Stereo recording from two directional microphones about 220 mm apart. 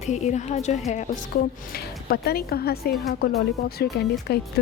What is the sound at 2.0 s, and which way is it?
A woman's voice, 45° left (ahead or behind).